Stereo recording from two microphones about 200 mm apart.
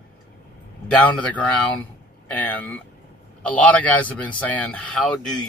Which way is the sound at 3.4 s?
5° left (ahead or behind).